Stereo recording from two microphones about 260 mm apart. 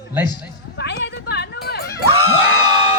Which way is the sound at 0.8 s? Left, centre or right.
Left.